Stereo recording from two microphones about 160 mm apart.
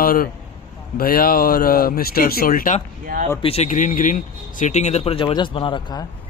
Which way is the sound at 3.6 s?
55° left (ahead or behind).